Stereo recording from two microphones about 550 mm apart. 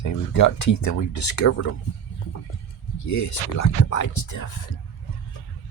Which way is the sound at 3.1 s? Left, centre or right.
Left.